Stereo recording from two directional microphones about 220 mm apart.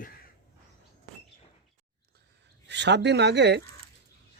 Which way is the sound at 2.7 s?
50° right (ahead or behind).